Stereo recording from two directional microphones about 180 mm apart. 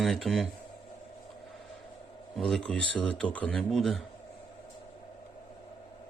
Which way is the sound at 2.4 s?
Centre (ahead or behind).